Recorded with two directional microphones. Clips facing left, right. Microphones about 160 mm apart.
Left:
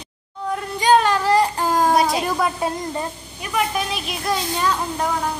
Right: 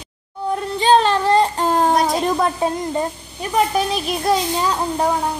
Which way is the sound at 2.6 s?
30° right (ahead or behind).